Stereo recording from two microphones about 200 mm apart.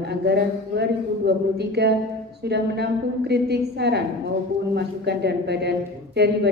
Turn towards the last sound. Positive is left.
turn(degrees=-55)  # may be behind; listen again after turning